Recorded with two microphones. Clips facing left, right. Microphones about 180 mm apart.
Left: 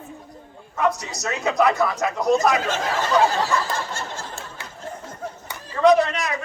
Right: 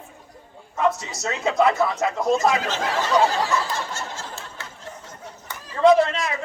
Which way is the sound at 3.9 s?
55° left (ahead or behind).